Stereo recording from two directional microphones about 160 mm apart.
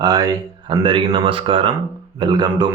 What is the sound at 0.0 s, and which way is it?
Speech, 25° right (ahead or behind).